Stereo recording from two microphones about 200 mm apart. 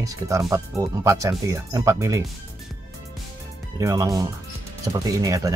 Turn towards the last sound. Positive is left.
turn(degrees=-15)  # may be behind; listen again after turning